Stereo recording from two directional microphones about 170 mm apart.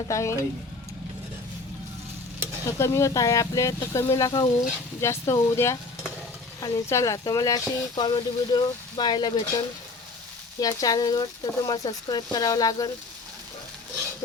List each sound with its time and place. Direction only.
0.1 s speech: 15° left (ahead or behind)
2.6 s speech: 15° left (ahead or behind)
10.6 s speech: 20° left (ahead or behind)